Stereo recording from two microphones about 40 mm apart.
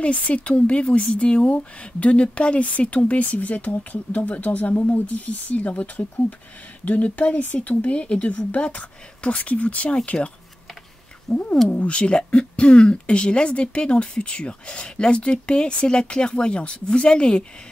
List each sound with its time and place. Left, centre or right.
0.0 s speech: left
11.2 s cat: left
11.7 s speech: left